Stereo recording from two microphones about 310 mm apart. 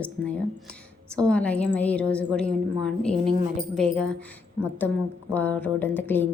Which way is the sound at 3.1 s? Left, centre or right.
Right.